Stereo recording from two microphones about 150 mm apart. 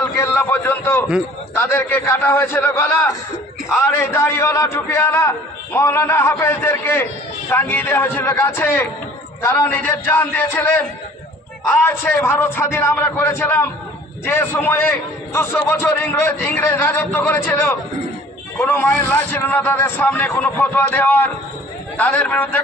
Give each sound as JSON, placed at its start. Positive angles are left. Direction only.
{"t": 0.0, "sound": "a man's voice", "side_deg": 20}
{"t": 11.8, "sound": "a man's voice", "side_deg": 15}